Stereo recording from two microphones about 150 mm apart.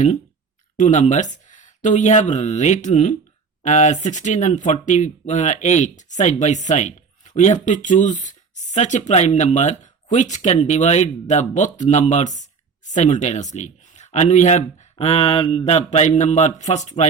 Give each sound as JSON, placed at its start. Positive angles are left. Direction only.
{"t": 0.8, "sound": "speech", "side_deg": 55}